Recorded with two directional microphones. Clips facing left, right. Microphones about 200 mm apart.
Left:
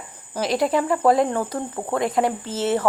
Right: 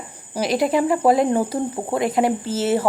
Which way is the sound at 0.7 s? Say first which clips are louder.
Right 1 dB; 15° right (ahead or behind).